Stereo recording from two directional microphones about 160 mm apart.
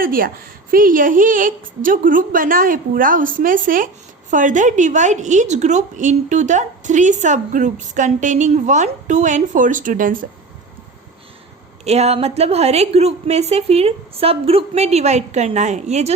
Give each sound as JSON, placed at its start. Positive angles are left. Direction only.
{"t": 0.0, "sound": "a woman's voice", "side_deg": -65}
{"t": 11.9, "sound": "a woman's voice", "side_deg": -40}